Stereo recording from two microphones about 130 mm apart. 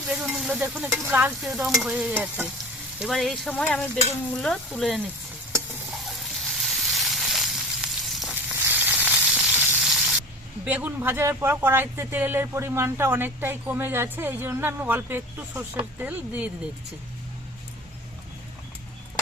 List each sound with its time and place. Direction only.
0.1 s stir: 5° right (ahead or behind)
0.6 s speech: 10° right (ahead or behind)
1.4 s speech: 5° right (ahead or behind)
3.0 s speech: centre (ahead or behind)
5.5 s sizzle: centre (ahead or behind)
8.6 s sizzle: 15° right (ahead or behind)
9.7 s spray: centre (ahead or behind)
10.7 s speech: 15° right (ahead or behind)